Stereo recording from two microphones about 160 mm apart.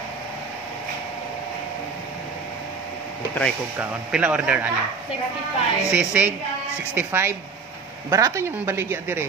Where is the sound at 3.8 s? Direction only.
10° right (ahead or behind).